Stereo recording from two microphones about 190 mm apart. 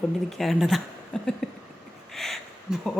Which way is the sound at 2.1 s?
Centre (ahead or behind).